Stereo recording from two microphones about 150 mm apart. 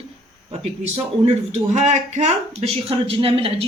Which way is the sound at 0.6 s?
45° right (ahead or behind).